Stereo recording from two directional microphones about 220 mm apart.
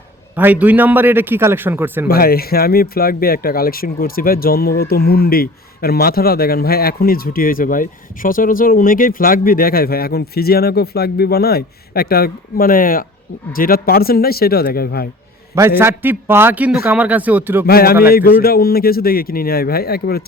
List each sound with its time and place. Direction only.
0.3 s a man's voice: 5° right (ahead or behind)
2.0 s speech: 45° left (ahead or behind)
15.8 s a man's voice: 10° right (ahead or behind)
17.7 s speech: 45° left (ahead or behind)